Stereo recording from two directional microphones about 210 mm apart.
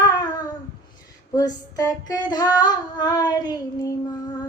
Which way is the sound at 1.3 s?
15° left (ahead or behind).